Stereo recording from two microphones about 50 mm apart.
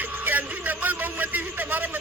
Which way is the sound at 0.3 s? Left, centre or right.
Right.